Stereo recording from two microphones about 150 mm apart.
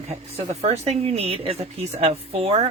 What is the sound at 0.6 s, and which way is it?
A woman's voice, 45° right (ahead or behind).